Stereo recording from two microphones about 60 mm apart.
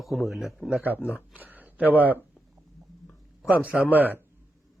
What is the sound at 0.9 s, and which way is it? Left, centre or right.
Speech, left.